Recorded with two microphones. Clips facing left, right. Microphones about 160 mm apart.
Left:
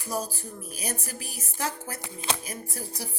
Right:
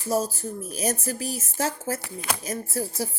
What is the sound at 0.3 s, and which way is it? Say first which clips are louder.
Speech: right 7 dB; 40° right (ahead or behind).